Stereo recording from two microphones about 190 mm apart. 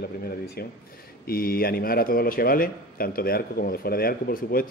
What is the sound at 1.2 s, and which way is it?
Speech, 50° left (ahead or behind).